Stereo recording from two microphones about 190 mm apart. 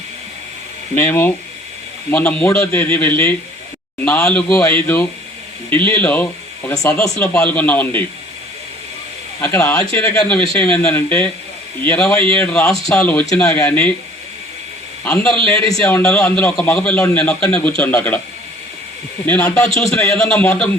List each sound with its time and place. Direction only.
0.9 s a man's voice: 10° left (ahead or behind)
9.4 s a man's voice: 15° left (ahead or behind)
15.0 s a man's voice: 5° left (ahead or behind)
19.2 s speech: 10° left (ahead or behind)